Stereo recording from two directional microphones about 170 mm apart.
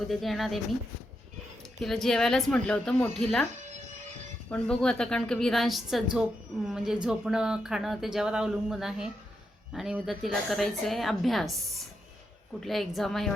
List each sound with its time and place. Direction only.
0.1 s speech: centre (ahead or behind)
1.8 s speech: centre (ahead or behind)
3.5 s music: 45° right (ahead or behind)
4.4 s speech: 5° left (ahead or behind)
12.5 s speech: centre (ahead or behind)